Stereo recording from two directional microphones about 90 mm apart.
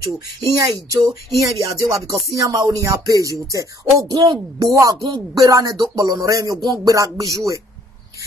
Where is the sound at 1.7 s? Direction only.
40° right (ahead or behind).